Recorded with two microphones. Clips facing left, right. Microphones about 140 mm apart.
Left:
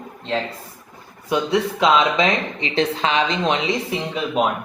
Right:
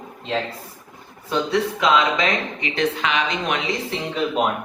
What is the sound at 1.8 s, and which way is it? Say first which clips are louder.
Speech: left 3 dB; 25° left (ahead or behind).